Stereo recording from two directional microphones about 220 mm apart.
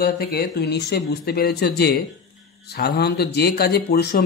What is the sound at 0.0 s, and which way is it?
Speech, 45° left (ahead or behind).